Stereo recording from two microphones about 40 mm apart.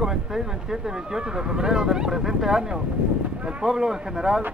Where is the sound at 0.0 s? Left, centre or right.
Centre.